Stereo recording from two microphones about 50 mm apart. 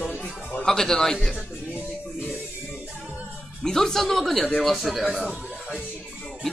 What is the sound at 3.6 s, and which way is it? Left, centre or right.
Speech, centre.